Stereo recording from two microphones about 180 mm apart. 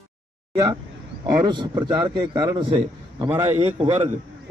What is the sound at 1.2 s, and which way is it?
A man's voice, 25° right (ahead or behind).